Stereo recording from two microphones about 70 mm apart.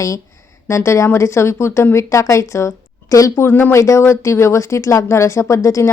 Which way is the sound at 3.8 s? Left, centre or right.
Left.